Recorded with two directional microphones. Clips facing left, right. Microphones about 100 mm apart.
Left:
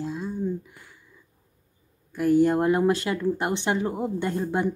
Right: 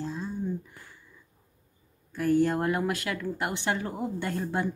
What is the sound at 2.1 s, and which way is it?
Speech, 15° left (ahead or behind).